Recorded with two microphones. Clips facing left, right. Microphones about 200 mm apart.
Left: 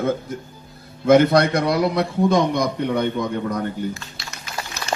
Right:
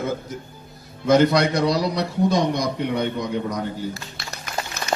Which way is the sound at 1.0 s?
55° left (ahead or behind).